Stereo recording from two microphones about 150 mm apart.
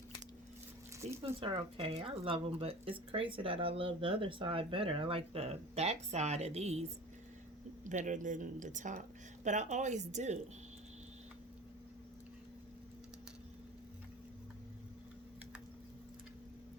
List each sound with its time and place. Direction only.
1.2 s speech: 35° right (ahead or behind)
7.9 s a woman's voice: 55° right (ahead or behind)